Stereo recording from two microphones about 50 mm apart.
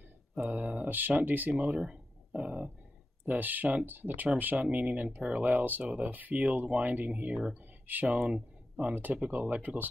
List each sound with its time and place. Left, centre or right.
0.4 s speech: right
1.8 s a sound: right
3.3 s speech: right